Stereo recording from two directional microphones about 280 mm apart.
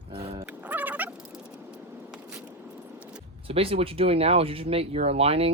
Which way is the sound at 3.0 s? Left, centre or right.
Centre.